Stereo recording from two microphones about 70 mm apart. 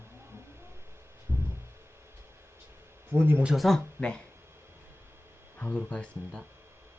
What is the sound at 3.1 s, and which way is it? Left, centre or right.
Speech, right.